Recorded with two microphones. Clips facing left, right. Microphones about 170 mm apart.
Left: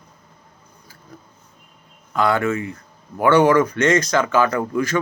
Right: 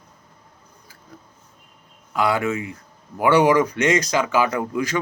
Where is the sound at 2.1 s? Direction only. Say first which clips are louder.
Left 2 dB; 10° right (ahead or behind).